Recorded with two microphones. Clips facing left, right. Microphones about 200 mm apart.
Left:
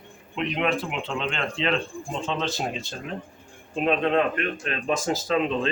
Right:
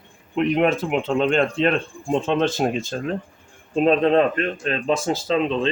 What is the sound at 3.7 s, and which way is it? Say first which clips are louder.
Speech: right 6 dB; 35° right (ahead or behind).